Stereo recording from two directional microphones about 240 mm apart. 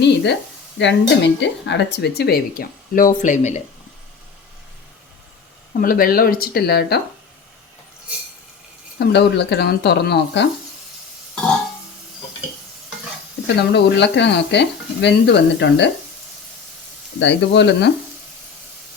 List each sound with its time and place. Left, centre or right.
0.0 s speech: left
5.8 s speech: left
9.0 s speech: left
13.6 s speech: left
17.2 s speech: left